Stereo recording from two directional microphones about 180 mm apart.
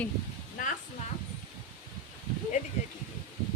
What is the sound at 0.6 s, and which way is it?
Speech, 50° left (ahead or behind).